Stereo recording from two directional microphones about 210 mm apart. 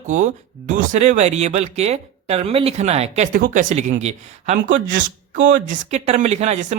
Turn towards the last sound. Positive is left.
turn(degrees=-35)  # may be behind; listen again after turning